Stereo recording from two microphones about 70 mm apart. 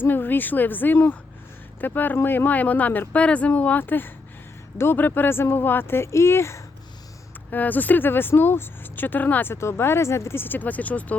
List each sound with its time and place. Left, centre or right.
0.0 s speech: left
7.5 s speech: left